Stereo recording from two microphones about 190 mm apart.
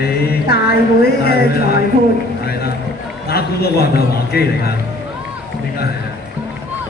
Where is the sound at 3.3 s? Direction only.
55° left (ahead or behind).